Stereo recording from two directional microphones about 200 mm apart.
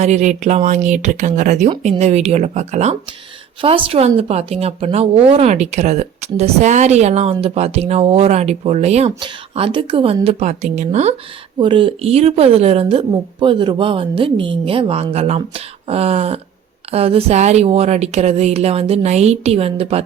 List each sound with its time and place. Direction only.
0.0 s a woman's voice: 35° right (ahead or behind)